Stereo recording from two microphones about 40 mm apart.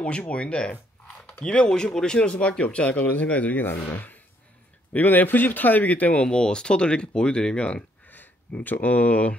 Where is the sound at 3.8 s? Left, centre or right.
Left.